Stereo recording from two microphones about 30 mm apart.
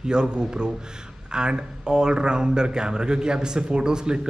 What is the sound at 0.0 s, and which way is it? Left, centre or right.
A man's voice, right.